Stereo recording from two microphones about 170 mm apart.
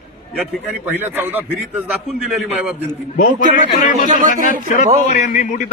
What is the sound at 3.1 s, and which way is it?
Speech, 50° left (ahead or behind).